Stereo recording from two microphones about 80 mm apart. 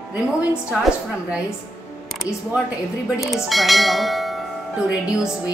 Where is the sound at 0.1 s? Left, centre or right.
Centre.